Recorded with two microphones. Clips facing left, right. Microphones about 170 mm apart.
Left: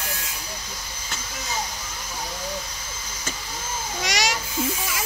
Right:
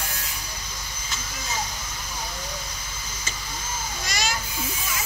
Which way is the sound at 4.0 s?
85° left.